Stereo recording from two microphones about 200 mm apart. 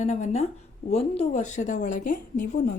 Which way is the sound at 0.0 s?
35° left (ahead or behind).